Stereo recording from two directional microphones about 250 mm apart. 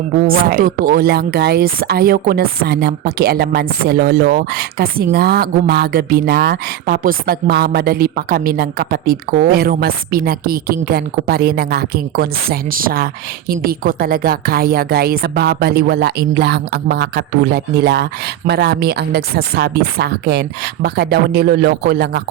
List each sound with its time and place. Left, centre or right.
0.3 s speech: right